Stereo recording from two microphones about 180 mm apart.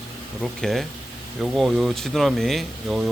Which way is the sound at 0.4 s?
Centre (ahead or behind).